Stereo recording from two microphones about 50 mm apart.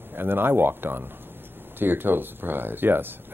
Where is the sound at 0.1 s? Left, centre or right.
Right.